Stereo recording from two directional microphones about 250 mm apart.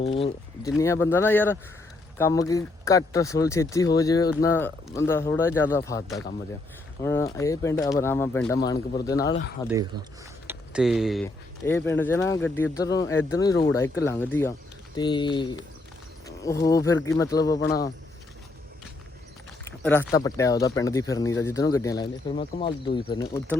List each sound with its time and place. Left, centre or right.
0.0 s speech: left
0.8 s speech: centre
9.9 s speech: right
10.4 s a sound: centre
11.6 s speech: centre
19.8 s speech: centre